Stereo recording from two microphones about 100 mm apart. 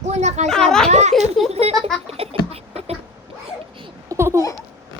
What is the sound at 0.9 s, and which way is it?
Speech, 90° right.